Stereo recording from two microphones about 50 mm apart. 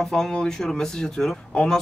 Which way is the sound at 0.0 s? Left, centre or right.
Centre.